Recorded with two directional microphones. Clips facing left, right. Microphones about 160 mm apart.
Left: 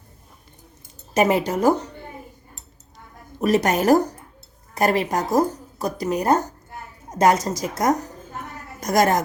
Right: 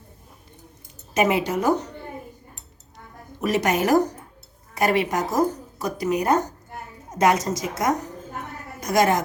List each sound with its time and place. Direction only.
1.1 s a woman's voice: 35° left (ahead or behind)
3.4 s a woman's voice: 35° left (ahead or behind)